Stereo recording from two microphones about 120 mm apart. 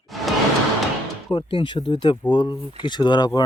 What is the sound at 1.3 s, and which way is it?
Speech, 45° left (ahead or behind).